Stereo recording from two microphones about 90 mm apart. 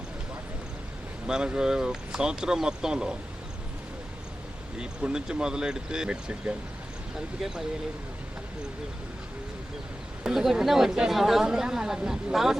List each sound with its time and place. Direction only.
1.3 s speech: 10° right (ahead or behind)
4.8 s speech: 10° right (ahead or behind)
10.2 s speech: 5° right (ahead or behind)